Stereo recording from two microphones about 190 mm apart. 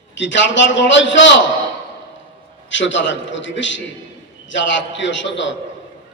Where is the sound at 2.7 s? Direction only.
75° left (ahead or behind).